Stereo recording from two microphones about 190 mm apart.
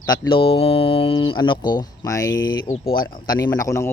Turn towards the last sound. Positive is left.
turn(degrees=15)  # may be behind; listen again after turning